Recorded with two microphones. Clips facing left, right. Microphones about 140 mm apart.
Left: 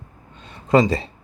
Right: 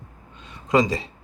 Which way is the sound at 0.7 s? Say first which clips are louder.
Left 4 dB; 30° left (ahead or behind).